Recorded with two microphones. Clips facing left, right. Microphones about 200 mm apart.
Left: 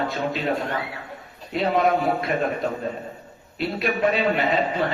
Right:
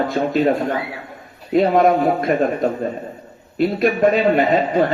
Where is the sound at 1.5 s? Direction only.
45° right (ahead or behind).